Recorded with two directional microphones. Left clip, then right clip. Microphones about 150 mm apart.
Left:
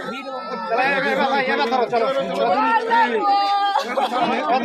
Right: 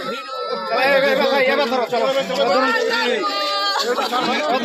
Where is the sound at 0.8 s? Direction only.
65° right (ahead or behind).